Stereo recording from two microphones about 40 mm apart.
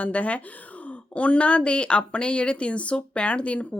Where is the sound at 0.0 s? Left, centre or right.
Left.